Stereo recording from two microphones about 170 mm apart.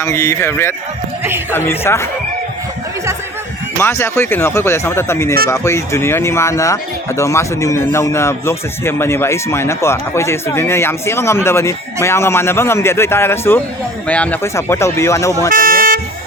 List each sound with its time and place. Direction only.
0.0 s speech: 20° left (ahead or behind)
1.2 s speech: 10° right (ahead or behind)
1.5 s speech: 15° left (ahead or behind)
3.8 s speech: 15° left (ahead or behind)
15.5 s vehicle: 55° right (ahead or behind)